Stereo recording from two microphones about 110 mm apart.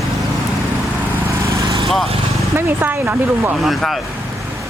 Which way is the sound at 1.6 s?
50° right (ahead or behind).